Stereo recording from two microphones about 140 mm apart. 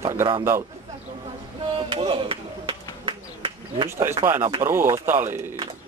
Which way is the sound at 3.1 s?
35° right (ahead or behind).